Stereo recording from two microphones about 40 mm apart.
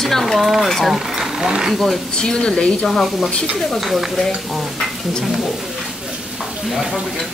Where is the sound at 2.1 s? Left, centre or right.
Left.